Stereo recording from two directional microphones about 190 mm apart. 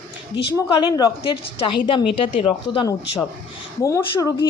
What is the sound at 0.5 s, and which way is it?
Speech, 20° left (ahead or behind).